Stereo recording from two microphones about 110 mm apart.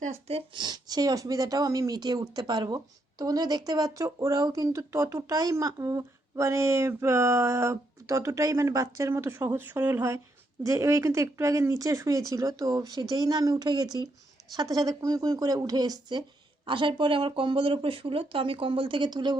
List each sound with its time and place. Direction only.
0.0 s speech: 75° right (ahead or behind)
0.5 s speech: 40° right (ahead or behind)